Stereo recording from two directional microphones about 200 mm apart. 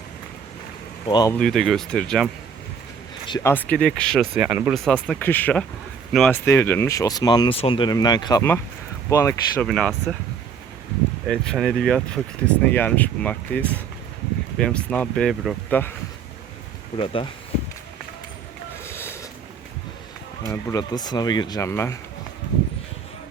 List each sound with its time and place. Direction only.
1.0 s speech: 20° left (ahead or behind)
1.3 s speech: 5° left (ahead or behind)
3.2 s speech: 20° left (ahead or behind)
3.5 s speech: 10° left (ahead or behind)
4.4 s speech: 10° right (ahead or behind)
4.7 s speech: 5° left (ahead or behind)
9.6 s speech: centre (ahead or behind)
11.3 s speech: centre (ahead or behind)
17.0 s speech: 25° left (ahead or behind)
18.9 s boat: 10° left (ahead or behind)
20.5 s speech: 15° left (ahead or behind)